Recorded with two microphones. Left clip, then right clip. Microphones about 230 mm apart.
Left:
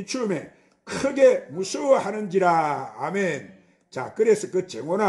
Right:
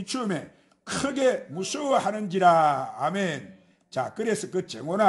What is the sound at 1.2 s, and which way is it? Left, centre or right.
Speech, right.